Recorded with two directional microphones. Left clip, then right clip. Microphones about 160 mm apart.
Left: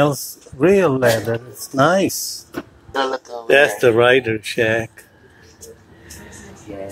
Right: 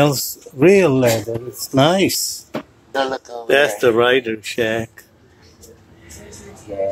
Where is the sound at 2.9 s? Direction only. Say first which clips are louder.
Even; 20° right (ahead or behind).